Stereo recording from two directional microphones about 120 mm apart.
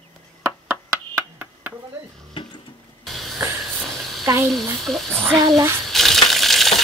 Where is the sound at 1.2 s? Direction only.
15° right (ahead or behind).